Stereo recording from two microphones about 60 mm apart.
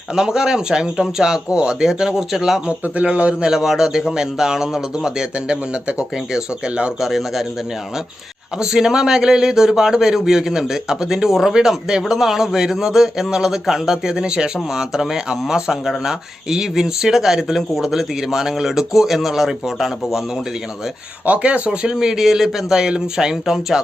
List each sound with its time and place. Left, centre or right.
0.2 s speech: centre
2.6 s a man's voice: right
7.0 s speech: centre
8.5 s speech: centre
21.2 s speech: right